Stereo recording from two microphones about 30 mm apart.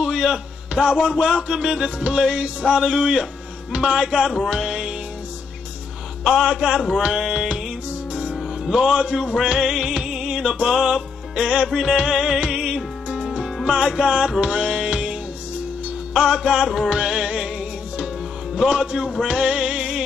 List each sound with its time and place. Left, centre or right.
0.0 s a sound: right
0.8 s music: right
6.2 s music: right
8.1 s music: right
8.6 s music: right
9.6 s music: right
19.2 s music: right